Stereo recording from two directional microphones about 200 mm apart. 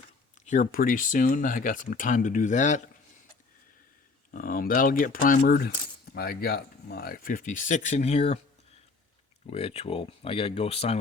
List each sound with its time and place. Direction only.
0.4 s speech: 40° left (ahead or behind)
4.3 s speech: 45° left (ahead or behind)
9.5 s speech: 30° left (ahead or behind)